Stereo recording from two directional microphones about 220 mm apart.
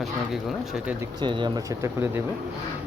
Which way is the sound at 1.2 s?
20° right (ahead or behind).